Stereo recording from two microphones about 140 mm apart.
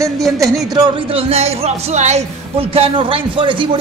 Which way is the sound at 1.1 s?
50° right (ahead or behind).